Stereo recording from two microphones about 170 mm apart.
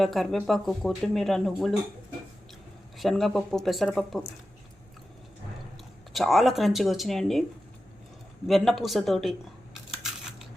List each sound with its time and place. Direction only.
0.0 s speech: centre (ahead or behind)
3.0 s speech: centre (ahead or behind)
6.1 s speech: centre (ahead or behind)
8.4 s speech: centre (ahead or behind)
9.9 s a sound: 5° right (ahead or behind)